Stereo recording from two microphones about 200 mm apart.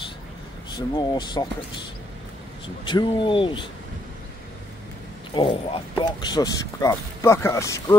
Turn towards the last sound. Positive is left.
turn(degrees=15)  # may be behind; listen again after turning